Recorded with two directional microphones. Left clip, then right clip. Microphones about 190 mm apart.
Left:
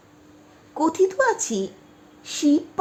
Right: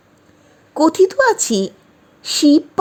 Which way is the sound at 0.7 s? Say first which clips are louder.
Right 8 dB; 25° right (ahead or behind).